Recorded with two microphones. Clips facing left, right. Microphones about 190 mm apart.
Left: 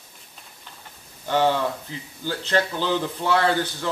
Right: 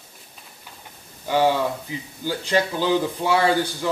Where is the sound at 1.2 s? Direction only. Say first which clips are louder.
Right 1 dB; 10° right (ahead or behind).